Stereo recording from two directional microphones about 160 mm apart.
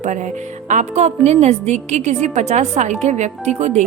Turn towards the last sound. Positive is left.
turn(degrees=-45)  # may be behind; listen again after turning